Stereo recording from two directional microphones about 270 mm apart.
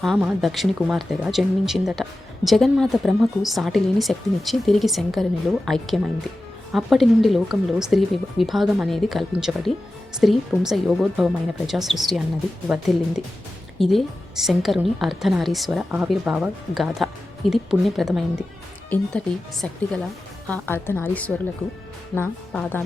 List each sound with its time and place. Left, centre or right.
0.0 s a woman's voice: centre